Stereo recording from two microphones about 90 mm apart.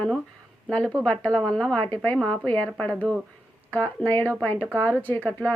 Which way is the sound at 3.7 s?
20° left (ahead or behind).